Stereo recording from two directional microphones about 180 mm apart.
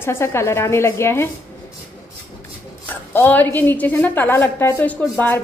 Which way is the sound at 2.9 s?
10° left (ahead or behind).